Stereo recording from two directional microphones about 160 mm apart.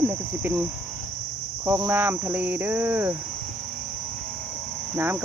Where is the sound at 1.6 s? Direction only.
20° right (ahead or behind).